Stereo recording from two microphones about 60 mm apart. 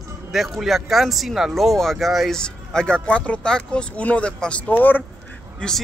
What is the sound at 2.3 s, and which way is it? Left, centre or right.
Speech, centre.